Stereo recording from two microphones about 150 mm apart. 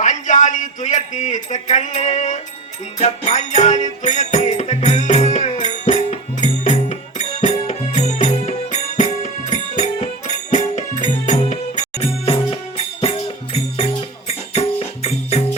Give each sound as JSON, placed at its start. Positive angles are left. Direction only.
{"t": 0.0, "sound": "speech", "side_deg": 55}
{"t": 3.0, "sound": "music", "side_deg": 50}